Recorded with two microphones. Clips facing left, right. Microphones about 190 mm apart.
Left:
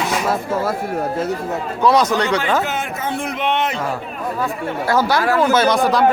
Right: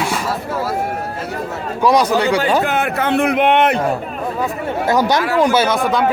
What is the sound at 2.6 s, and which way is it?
Speech, 65° right (ahead or behind).